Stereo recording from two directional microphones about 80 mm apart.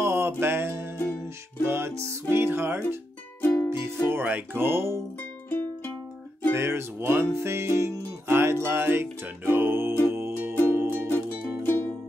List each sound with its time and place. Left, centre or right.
0.0 s music: right
3.3 s music: left
4.1 s music: right
6.5 s music: right
11.1 s music: left